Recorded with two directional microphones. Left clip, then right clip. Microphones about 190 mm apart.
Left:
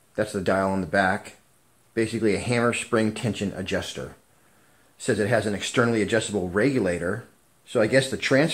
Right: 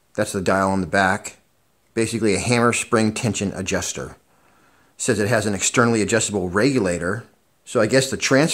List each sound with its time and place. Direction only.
0.1 s speech: 35° right (ahead or behind)